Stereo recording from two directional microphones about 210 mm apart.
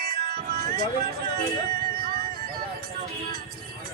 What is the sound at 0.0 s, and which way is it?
Music, 45° right (ahead or behind).